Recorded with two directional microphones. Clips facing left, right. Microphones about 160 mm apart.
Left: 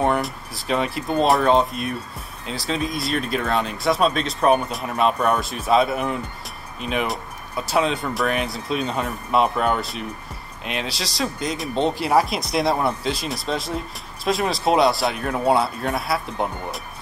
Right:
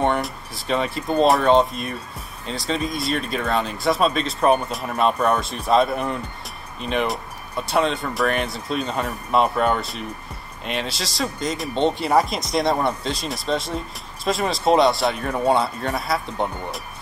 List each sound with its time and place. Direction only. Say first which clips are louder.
0.0 s speech: even; centre (ahead or behind)